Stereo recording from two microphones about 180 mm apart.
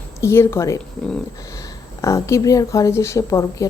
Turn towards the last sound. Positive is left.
turn(degrees=15)  # may be behind; listen again after turning